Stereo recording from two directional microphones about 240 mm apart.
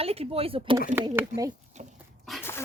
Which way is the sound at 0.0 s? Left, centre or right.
Right.